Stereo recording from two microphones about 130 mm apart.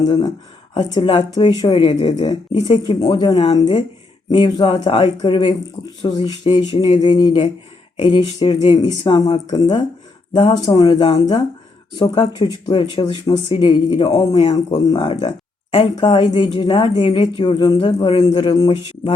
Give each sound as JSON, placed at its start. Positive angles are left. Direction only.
{"t": 0.0, "sound": "speech", "side_deg": 30}
{"t": 10.3, "sound": "speech", "side_deg": 50}
{"t": 10.8, "sound": "speech", "side_deg": 35}